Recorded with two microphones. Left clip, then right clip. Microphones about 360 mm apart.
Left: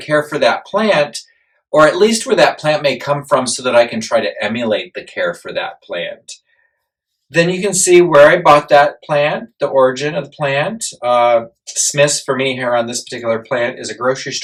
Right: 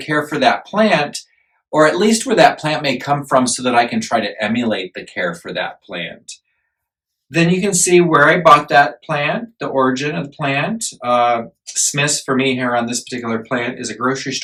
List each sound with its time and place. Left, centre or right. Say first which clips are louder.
0.1 s speech: left 2 dB; centre
7.3 s speech: left 2 dB; centre